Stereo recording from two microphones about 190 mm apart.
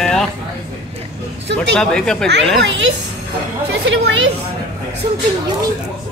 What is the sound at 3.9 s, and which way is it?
Speech, 65° right (ahead or behind).